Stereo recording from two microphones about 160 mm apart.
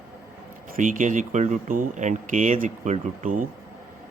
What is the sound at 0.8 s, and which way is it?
Speech, 55° right (ahead or behind).